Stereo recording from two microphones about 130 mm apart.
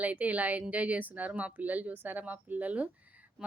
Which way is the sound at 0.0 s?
10° right (ahead or behind).